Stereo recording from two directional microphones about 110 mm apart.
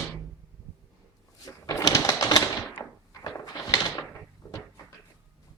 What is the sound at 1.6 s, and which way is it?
Typewriter, 30° left (ahead or behind).